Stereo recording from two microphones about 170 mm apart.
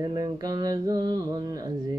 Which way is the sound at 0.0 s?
20° right (ahead or behind).